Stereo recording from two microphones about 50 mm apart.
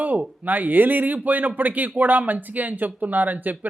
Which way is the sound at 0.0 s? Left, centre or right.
Right.